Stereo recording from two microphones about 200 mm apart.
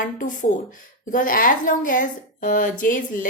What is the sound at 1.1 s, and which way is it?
A woman's voice, 45° left (ahead or behind).